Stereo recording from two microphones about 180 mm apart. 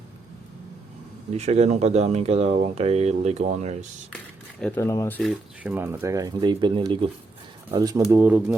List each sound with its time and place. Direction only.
1.3 s speech: 35° right (ahead or behind)
4.6 s speech: 15° left (ahead or behind)
5.7 s speech: 10° right (ahead or behind)
8.1 s speech: 10° right (ahead or behind)